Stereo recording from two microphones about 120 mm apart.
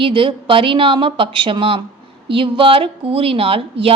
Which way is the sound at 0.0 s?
45° right (ahead or behind).